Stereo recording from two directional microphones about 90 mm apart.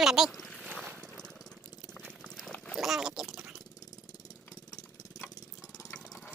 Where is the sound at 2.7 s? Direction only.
5° right (ahead or behind).